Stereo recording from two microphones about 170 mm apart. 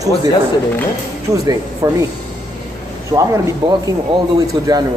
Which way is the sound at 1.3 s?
20° right (ahead or behind).